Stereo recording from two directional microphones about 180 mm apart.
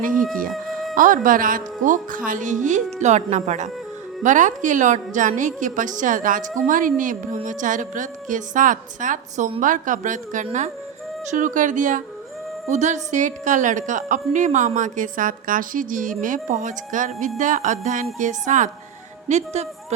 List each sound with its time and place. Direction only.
0.0 s music: 50° right (ahead or behind)
0.5 s music: centre (ahead or behind)
0.9 s a woman's voice: 50° right (ahead or behind)